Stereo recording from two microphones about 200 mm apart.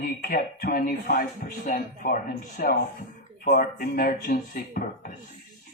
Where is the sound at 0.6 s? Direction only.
45° left (ahead or behind).